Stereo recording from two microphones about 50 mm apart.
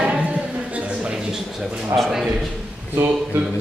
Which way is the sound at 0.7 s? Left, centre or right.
Right.